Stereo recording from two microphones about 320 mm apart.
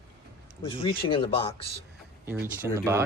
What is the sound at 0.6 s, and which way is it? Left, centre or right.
Speech, centre.